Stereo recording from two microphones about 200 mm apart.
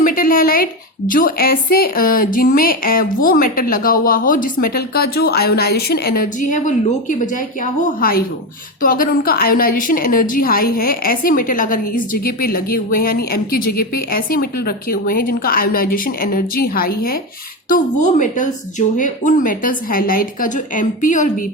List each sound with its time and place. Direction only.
0.0 s a woman's voice: 45° left (ahead or behind)